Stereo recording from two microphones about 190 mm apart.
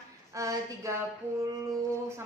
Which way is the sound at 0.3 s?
15° right (ahead or behind).